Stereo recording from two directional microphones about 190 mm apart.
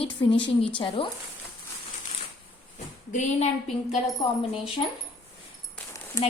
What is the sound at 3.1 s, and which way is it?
Speech, 35° left (ahead or behind).